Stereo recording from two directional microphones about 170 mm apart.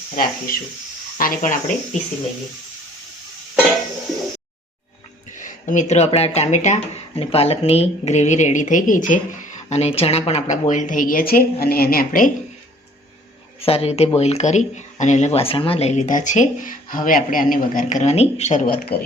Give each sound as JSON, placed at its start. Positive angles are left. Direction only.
{"t": 0.2, "sound": "speech", "side_deg": 55}
{"t": 5.4, "sound": "speech", "side_deg": 50}
{"t": 13.6, "sound": "speech", "side_deg": 35}